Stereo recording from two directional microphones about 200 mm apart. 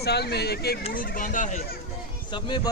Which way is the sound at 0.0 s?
55° left (ahead or behind).